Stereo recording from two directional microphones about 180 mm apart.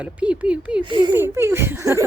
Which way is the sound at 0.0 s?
5° right (ahead or behind).